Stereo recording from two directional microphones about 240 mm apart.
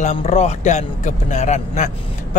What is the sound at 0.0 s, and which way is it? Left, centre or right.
Speech, left.